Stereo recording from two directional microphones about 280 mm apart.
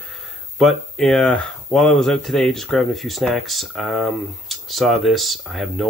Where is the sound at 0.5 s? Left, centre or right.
Centre.